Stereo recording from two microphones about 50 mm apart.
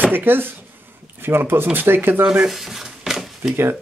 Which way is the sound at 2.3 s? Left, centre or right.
Centre.